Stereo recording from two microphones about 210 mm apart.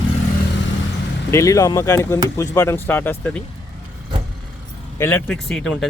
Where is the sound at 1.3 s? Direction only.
15° left (ahead or behind).